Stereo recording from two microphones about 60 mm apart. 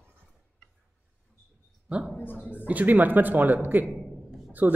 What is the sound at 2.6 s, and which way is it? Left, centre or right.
Speech, right.